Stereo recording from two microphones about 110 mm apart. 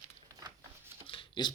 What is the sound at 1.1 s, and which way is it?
Shuffling cards, 50° left (ahead or behind).